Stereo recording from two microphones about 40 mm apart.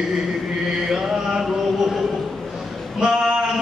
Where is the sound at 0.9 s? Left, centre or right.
Centre.